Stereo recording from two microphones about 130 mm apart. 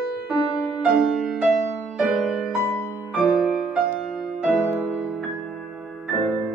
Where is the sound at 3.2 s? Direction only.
5° right (ahead or behind).